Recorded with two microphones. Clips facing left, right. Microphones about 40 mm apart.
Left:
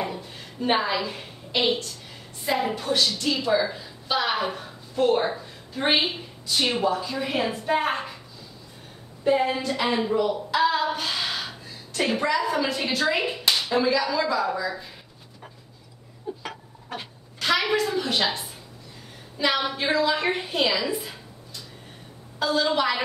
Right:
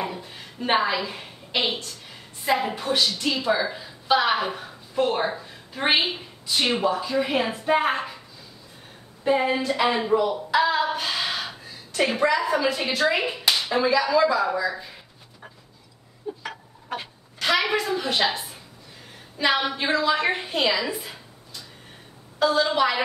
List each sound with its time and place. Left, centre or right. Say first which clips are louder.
0.0 s a sound: even; centre
2.4 s a woman's voice: right 1 dB; centre
9.2 s speech: even; centre
16.3 s chicken: right 1 dB; centre
16.9 s a woman's voice: right 3 dB; centre
22.4 s a woman's voice: right 2 dB; centre